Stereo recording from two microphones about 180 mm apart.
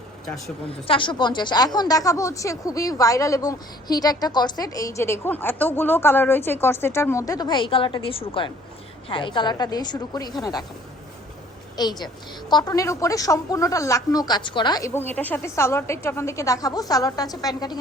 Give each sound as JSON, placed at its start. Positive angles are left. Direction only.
{"t": 0.7, "sound": "speech", "side_deg": 30}
{"t": 11.8, "sound": "speech", "side_deg": 25}